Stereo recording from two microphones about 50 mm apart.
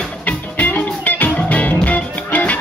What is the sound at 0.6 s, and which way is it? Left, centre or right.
Music, left.